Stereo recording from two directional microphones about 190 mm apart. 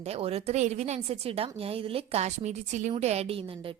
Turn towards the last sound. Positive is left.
turn(degrees=-30)  # may be behind; listen again after turning